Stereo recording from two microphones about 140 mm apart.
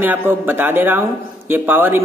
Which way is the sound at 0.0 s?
15° right (ahead or behind).